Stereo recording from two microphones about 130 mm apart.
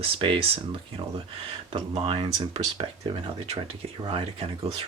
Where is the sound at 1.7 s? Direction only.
45° right (ahead or behind).